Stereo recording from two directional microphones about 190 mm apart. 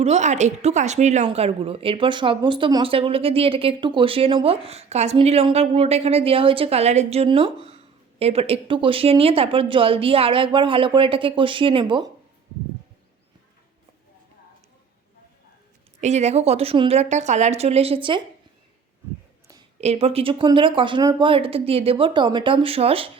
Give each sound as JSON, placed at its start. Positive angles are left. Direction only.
{"t": 0.0, "sound": "a woman's voice", "side_deg": -35}
{"t": 16.0, "sound": "a woman's voice", "side_deg": -35}
{"t": 19.8, "sound": "speech", "side_deg": -35}